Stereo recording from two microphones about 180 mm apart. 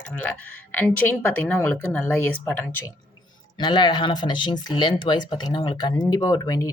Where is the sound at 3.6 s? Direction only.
25° left (ahead or behind).